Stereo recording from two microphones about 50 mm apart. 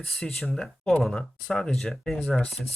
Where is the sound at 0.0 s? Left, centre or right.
Centre.